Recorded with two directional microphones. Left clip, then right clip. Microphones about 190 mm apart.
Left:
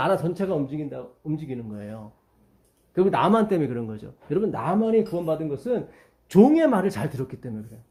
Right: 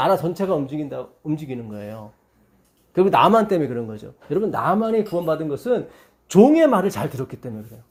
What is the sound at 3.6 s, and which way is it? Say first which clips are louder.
Speech: right 3 dB; centre (ahead or behind).